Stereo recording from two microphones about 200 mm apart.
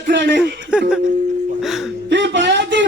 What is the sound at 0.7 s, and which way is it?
Music, 5° right (ahead or behind).